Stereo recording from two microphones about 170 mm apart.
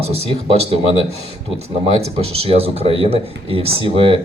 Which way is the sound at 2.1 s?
35° right (ahead or behind).